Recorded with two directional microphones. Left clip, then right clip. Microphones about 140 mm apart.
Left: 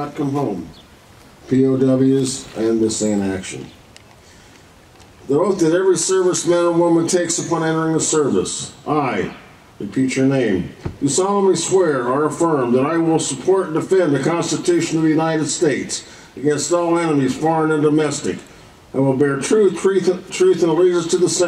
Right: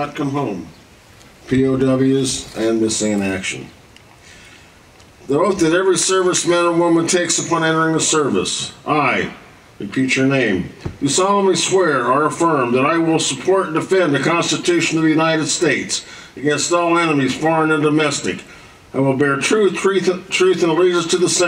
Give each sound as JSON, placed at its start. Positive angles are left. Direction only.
{"t": 0.0, "sound": "a man's voice", "side_deg": -20}
{"t": 1.5, "sound": "a man's voice", "side_deg": -20}
{"t": 5.3, "sound": "a man's voice", "side_deg": -20}